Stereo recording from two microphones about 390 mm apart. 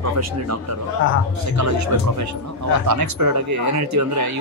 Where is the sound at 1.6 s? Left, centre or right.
Right.